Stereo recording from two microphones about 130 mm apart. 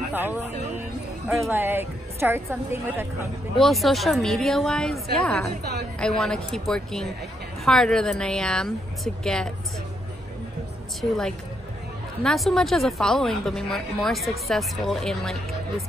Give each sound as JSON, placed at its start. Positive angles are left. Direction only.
{"t": 1.5, "sound": "a woman's voice", "side_deg": -15}
{"t": 3.5, "sound": "a woman's voice", "side_deg": 0}
{"t": 11.0, "sound": "a woman's voice", "side_deg": 5}